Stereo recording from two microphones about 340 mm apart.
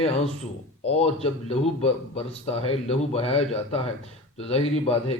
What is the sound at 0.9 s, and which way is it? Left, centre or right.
A man's voice, centre.